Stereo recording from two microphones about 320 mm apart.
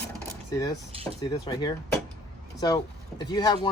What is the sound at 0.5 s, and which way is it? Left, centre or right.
Speech, centre.